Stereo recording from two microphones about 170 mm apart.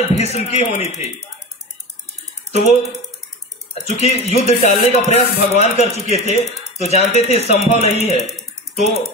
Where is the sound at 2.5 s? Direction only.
40° left (ahead or behind).